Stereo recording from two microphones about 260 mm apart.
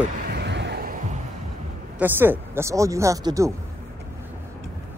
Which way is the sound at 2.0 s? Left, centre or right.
Centre.